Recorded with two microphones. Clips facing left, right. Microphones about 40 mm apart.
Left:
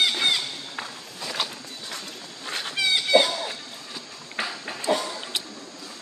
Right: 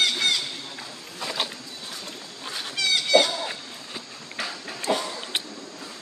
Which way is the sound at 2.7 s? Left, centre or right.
Centre.